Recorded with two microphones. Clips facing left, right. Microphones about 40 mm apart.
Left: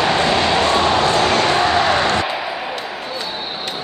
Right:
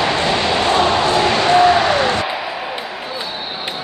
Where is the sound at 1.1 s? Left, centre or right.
Right.